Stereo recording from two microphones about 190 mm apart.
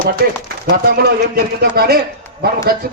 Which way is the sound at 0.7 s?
55° right (ahead or behind).